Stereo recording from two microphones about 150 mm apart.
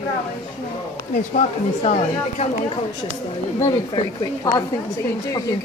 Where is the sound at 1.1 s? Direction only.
50° left (ahead or behind).